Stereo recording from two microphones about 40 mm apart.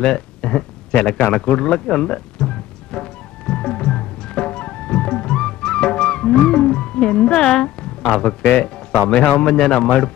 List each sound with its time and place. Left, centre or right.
0.0 s speech: left
1.0 s music: left
7.3 s a sound: centre
8.2 s a man's voice: left
9.5 s a man's voice: centre